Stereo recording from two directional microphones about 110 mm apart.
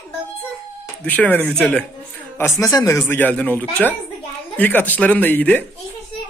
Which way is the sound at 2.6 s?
30° left (ahead or behind).